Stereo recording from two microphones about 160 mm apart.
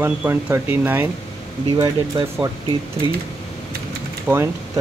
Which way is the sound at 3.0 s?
30° left (ahead or behind).